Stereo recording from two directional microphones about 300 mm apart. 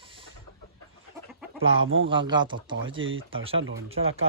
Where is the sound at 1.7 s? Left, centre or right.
Right.